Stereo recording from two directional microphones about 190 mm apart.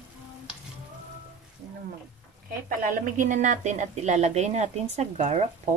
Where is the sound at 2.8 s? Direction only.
45° right (ahead or behind).